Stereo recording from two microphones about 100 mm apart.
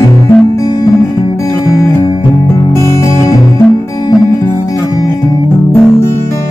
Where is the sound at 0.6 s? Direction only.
40° left (ahead or behind).